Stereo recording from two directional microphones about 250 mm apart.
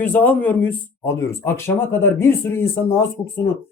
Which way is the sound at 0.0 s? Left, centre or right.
Centre.